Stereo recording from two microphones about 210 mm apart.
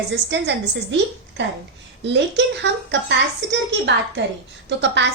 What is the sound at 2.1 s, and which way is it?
A woman's voice, 55° right (ahead or behind).